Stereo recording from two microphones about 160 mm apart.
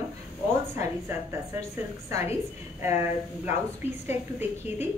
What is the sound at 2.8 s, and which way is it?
A woman's voice, 15° right (ahead or behind).